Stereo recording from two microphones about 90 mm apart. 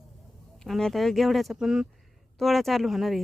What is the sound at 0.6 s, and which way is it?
A woman's voice, 5° left (ahead or behind).